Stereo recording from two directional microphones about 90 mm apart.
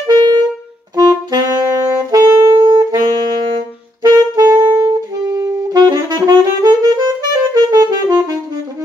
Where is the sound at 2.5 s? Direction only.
60° right (ahead or behind).